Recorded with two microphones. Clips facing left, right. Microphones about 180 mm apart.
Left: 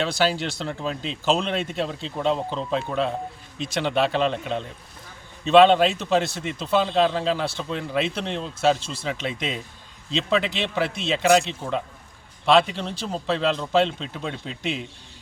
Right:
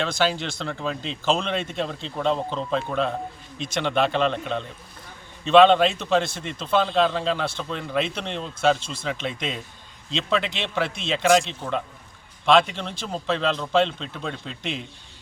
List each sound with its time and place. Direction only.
0.6 s speech: 5° left (ahead or behind)
8.8 s speech: 35° left (ahead or behind)
9.2 s speech: centre (ahead or behind)